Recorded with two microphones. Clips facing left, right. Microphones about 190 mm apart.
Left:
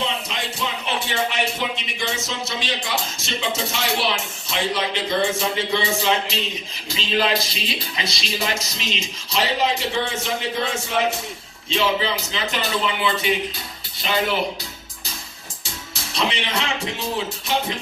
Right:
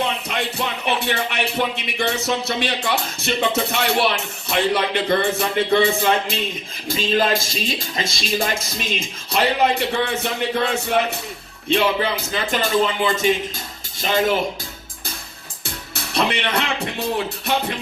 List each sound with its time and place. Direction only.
0.0 s music: 60° right (ahead or behind)
1.0 s speech: 60° right (ahead or behind); by 14.3 s 45° right (ahead or behind)
15.6 s speech: 60° right (ahead or behind)